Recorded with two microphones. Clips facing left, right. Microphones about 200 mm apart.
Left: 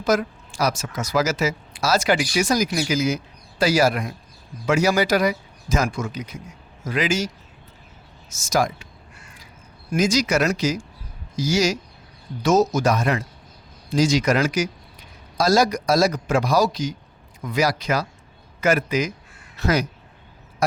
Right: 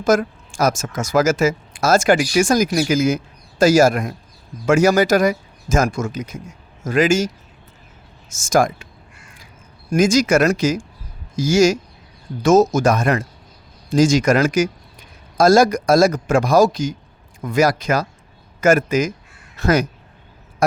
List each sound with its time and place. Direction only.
0.0 s a woman's voice: 50° right (ahead or behind)
8.3 s a woman's voice: 50° right (ahead or behind)
9.9 s a woman's voice: 50° right (ahead or behind)